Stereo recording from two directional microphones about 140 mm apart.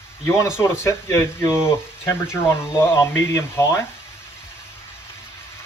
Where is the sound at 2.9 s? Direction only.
20° left (ahead or behind).